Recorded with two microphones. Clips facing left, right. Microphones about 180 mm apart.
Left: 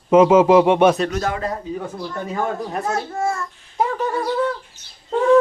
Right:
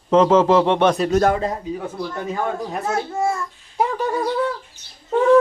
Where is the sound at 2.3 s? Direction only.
5° right (ahead or behind).